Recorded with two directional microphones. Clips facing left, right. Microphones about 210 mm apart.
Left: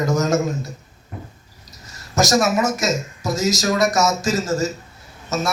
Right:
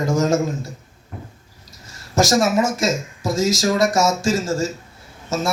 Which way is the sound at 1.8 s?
30° right (ahead or behind).